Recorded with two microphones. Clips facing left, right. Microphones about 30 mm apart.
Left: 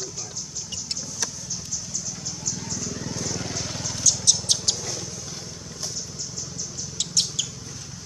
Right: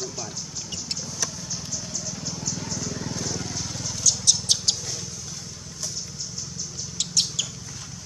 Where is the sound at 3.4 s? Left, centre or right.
Left.